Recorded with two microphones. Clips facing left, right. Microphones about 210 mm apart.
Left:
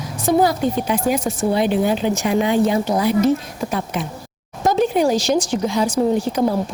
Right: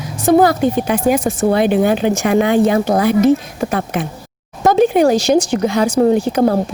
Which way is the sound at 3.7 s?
75° right (ahead or behind).